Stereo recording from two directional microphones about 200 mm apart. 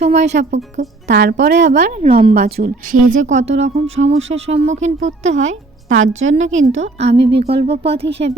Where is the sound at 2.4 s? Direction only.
50° right (ahead or behind).